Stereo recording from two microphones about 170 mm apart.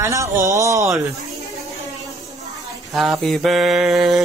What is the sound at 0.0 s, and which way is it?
Speech, 20° right (ahead or behind).